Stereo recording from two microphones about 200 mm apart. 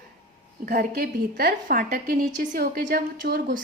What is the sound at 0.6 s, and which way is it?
A woman's voice, 45° right (ahead or behind).